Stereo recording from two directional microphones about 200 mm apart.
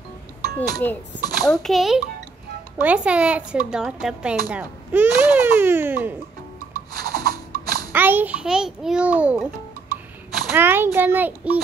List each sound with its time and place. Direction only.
0.7 s speech: 20° left (ahead or behind)
1.4 s a child's voice: centre (ahead or behind)
6.7 s a sound: 20° left (ahead or behind)
7.9 s speech: 10° right (ahead or behind)
10.5 s speech: 10° right (ahead or behind)